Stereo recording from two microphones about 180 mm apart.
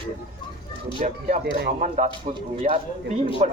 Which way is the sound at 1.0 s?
40° right (ahead or behind).